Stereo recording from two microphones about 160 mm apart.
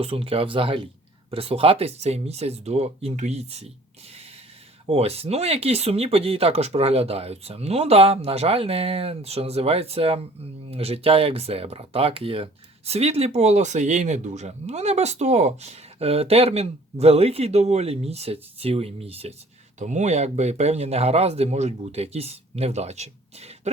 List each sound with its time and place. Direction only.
0.0 s speech: 35° right (ahead or behind)
4.9 s speech: 40° right (ahead or behind)
19.8 s speech: 50° right (ahead or behind)